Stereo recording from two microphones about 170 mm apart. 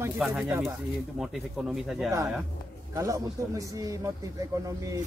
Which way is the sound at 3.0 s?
20° right (ahead or behind).